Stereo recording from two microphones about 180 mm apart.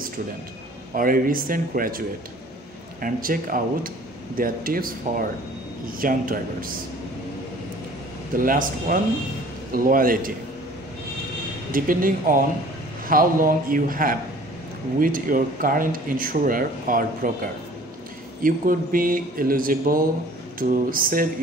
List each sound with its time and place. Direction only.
0.9 s speech: 50° right (ahead or behind)
8.4 s speech: 50° right (ahead or behind)
11.7 s speech: 50° right (ahead or behind)